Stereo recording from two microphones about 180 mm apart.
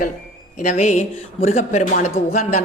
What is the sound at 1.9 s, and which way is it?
Speech, 50° left (ahead or behind).